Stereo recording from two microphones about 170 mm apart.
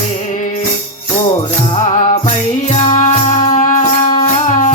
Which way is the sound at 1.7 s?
40° left (ahead or behind).